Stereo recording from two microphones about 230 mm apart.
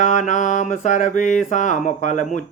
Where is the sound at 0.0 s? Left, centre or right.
Left.